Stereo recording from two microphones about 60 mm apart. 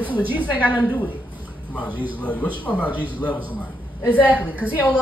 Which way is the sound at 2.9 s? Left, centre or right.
Right.